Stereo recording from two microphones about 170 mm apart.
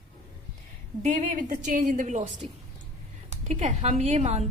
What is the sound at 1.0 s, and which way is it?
A woman's voice, 45° right (ahead or behind).